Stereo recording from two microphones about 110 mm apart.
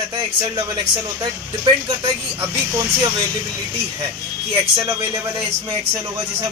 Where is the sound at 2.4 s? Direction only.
25° right (ahead or behind).